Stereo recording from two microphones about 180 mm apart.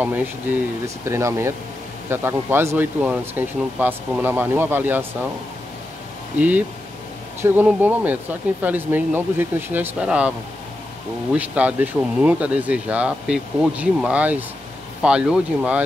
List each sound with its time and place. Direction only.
0.0 s speech: 10° right (ahead or behind)
7.4 s speech: 10° right (ahead or behind)
11.3 s speech: 10° right (ahead or behind)